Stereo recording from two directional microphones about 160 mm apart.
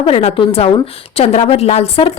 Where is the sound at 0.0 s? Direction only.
40° left (ahead or behind).